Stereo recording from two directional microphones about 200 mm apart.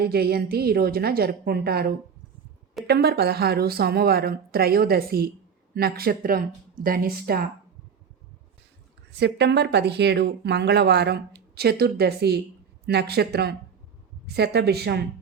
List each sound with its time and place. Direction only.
0.0 s speech: 50° right (ahead or behind)
9.1 s speech: 55° right (ahead or behind)